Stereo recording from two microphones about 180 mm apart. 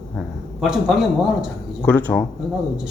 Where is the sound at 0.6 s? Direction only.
Centre (ahead or behind).